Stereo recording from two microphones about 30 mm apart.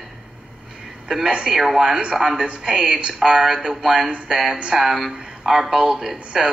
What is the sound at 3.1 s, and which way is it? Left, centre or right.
Speech, centre.